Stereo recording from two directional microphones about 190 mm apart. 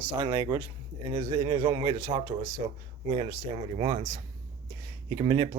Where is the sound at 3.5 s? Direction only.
30° right (ahead or behind).